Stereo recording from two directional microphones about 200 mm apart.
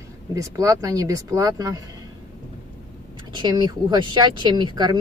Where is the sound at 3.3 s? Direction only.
20° right (ahead or behind).